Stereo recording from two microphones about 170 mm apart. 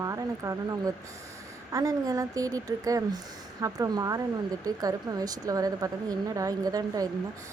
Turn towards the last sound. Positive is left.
turn(degrees=-20)  # may be behind; listen again after turning